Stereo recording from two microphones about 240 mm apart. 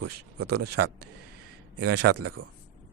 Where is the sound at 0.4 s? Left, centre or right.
Right.